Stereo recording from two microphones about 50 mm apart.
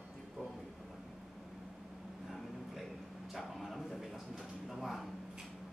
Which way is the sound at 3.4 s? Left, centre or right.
Centre.